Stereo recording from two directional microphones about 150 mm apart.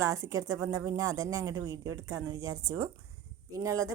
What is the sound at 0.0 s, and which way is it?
Speech, 20° right (ahead or behind).